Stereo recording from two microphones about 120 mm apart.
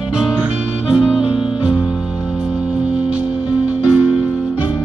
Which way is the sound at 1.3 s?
10° right (ahead or behind).